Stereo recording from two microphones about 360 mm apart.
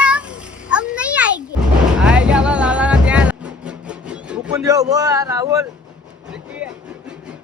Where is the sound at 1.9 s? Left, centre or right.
Centre.